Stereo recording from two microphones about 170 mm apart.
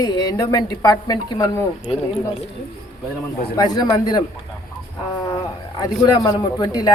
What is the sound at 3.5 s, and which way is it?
Speech, 20° left (ahead or behind).